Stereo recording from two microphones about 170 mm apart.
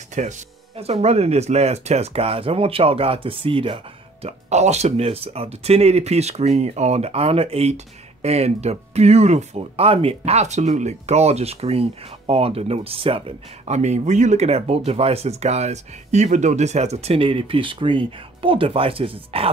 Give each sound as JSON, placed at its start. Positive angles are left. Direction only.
{"t": 0.1, "sound": "speech", "side_deg": -45}